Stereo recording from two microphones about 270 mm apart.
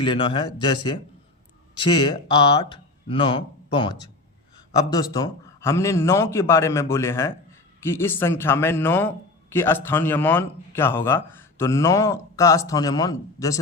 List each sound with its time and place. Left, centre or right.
0.0 s a man's voice: centre